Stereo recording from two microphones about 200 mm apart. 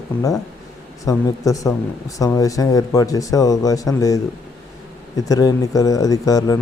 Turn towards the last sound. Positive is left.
turn(degrees=15)  # may be behind; listen again after turning